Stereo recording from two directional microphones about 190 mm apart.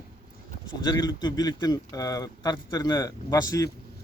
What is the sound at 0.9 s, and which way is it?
A man's voice, 20° left (ahead or behind).